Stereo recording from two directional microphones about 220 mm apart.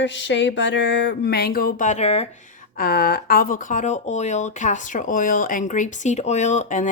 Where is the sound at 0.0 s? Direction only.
55° left (ahead or behind); by 2.2 s 30° left (ahead or behind).